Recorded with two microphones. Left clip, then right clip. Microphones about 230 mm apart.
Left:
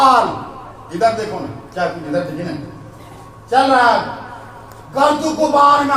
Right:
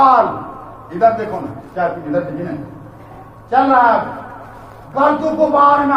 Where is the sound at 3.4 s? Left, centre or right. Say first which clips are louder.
Even; left.